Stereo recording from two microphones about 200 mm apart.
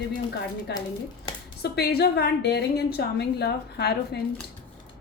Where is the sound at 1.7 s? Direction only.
50° left (ahead or behind).